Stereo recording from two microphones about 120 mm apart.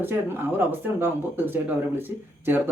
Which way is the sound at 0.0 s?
15° right (ahead or behind).